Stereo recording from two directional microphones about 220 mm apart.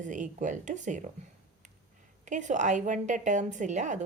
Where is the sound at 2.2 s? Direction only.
35° right (ahead or behind).